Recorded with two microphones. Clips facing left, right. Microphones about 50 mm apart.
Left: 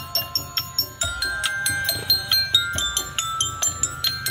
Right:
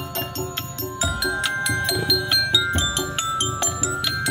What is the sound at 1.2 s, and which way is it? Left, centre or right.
Music, centre.